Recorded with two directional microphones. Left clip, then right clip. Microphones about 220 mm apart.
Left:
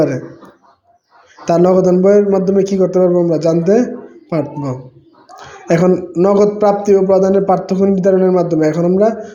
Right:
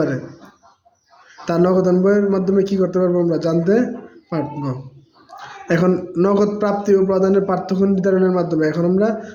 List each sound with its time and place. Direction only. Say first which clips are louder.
1.5 s a man's voice: left 5 dB; 10° left (ahead or behind)